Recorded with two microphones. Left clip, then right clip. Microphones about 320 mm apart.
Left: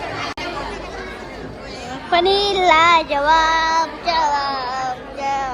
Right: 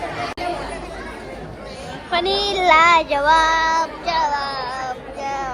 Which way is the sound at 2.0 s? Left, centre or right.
Centre.